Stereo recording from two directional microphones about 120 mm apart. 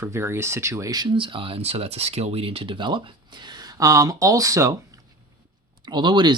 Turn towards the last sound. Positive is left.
turn(degrees=-40)  # may be behind; listen again after turning